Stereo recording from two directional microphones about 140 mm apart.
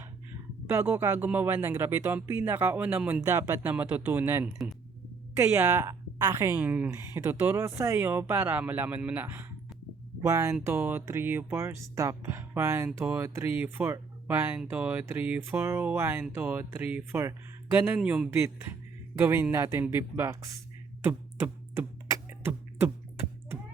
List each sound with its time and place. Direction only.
0.7 s a woman's voice: 15° right (ahead or behind)
21.0 s beatboxing: 15° right (ahead or behind)